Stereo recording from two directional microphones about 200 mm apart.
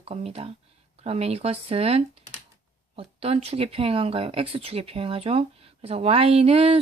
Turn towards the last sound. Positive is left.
turn(degrees=-30)  # may be behind; listen again after turning